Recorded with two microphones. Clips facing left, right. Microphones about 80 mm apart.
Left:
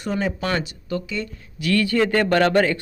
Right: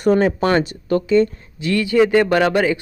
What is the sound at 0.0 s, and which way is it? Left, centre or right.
Speech, right.